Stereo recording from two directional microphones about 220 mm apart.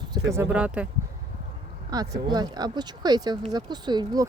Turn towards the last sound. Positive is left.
turn(degrees=-20)  # may be behind; listen again after turning